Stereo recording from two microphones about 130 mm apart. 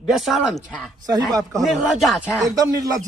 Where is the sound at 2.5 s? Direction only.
25° right (ahead or behind).